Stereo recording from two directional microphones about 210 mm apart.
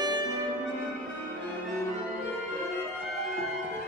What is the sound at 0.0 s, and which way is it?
Music, 20° right (ahead or behind).